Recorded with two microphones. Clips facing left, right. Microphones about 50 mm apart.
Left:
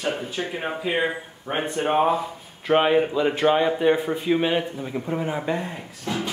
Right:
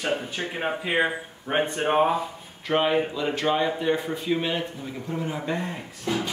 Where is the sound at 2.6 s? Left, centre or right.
Centre.